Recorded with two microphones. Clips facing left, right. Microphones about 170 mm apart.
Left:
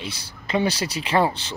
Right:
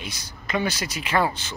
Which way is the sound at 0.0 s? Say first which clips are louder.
Left 3 dB; 30° left (ahead or behind).